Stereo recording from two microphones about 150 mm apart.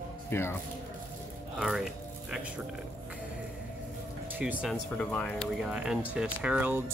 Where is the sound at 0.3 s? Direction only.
15° left (ahead or behind).